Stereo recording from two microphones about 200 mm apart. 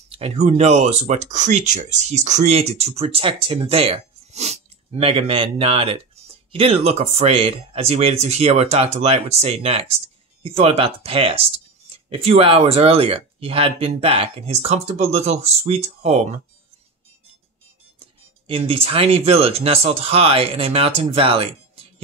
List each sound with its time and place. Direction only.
0.1 s speech: 30° right (ahead or behind)
18.5 s speech: 30° right (ahead or behind)